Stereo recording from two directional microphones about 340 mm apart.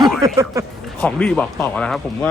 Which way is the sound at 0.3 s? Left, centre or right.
Centre.